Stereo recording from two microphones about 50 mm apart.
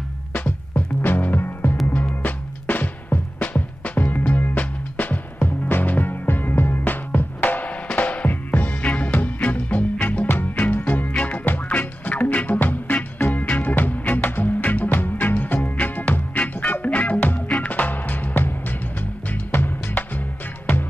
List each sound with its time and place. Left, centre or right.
0.4 s music: left
10.2 s music: left